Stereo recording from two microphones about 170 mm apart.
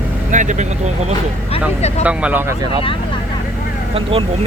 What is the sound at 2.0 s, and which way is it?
Speech, 5° right (ahead or behind).